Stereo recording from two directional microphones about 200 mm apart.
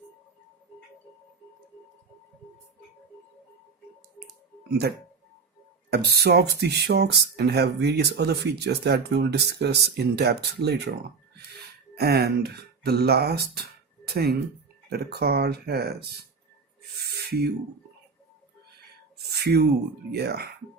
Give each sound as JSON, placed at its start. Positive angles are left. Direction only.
{"t": 5.9, "sound": "speech", "side_deg": -50}
{"t": 11.9, "sound": "speech", "side_deg": -50}
{"t": 17.2, "sound": "speech", "side_deg": -55}
{"t": 19.3, "sound": "speech", "side_deg": -50}